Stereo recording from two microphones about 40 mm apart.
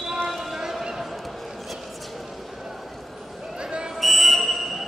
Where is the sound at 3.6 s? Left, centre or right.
Right.